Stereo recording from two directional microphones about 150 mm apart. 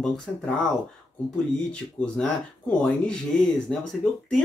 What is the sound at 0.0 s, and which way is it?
Speech, 5° left (ahead or behind).